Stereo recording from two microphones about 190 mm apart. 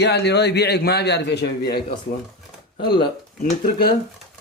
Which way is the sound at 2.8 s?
25° left (ahead or behind).